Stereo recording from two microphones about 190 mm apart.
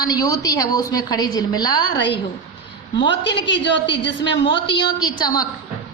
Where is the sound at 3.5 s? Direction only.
70° left (ahead or behind).